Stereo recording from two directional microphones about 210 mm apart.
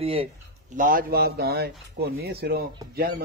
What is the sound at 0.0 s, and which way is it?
Speech, 25° right (ahead or behind).